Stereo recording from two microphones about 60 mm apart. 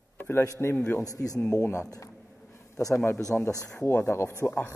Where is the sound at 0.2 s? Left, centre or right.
Left.